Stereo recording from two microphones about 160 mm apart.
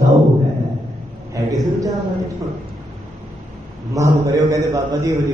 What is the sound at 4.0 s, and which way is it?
A man's voice, 20° right (ahead or behind).